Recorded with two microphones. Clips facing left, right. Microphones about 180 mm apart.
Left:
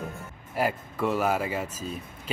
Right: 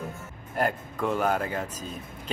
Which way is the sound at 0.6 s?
5° left (ahead or behind).